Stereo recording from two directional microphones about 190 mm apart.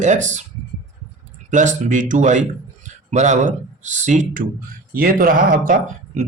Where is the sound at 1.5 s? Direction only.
40° right (ahead or behind).